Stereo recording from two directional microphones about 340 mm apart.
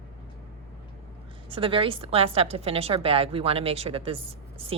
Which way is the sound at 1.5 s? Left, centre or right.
Centre.